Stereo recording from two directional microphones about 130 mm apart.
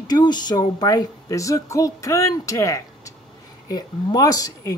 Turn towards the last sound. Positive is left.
turn(degrees=25)  # may be behind; listen again after turning